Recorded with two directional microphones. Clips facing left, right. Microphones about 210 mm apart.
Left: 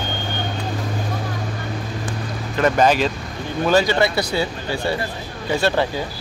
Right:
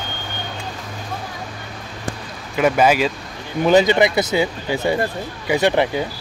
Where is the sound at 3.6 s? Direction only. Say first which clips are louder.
Right 3 dB; 20° right (ahead or behind).